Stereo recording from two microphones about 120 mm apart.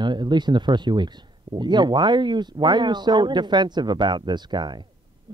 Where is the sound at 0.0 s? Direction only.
40° right (ahead or behind).